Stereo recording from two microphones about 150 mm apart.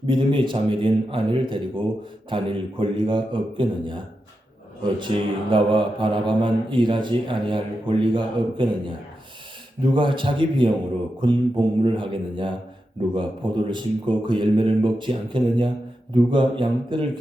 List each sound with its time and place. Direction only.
0.0 s mantra: 35° right (ahead or behind)
4.9 s mantra: 35° right (ahead or behind)